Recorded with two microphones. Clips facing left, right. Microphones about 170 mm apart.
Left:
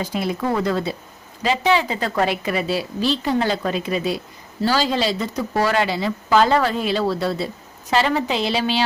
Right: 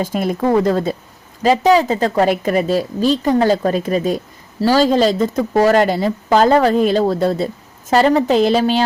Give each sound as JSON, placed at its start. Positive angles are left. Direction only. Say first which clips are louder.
{"t": 0.0, "sound": "a woman's voice", "louder": "right 5 dB", "side_deg": -50}